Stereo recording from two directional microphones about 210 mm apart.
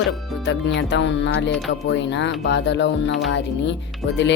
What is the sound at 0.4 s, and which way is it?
Speech, 55° left (ahead or behind).